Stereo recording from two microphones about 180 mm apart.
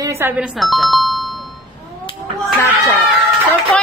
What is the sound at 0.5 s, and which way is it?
Doorbell, centre (ahead or behind).